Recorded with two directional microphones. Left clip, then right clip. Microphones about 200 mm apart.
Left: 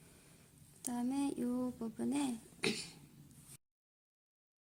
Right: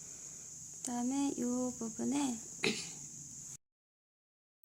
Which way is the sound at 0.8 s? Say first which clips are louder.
Right 2 dB; centre (ahead or behind).